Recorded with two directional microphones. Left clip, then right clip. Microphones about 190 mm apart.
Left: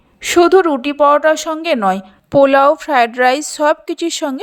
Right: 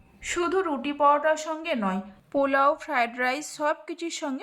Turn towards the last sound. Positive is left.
turn(degrees=35)  # may be behind; listen again after turning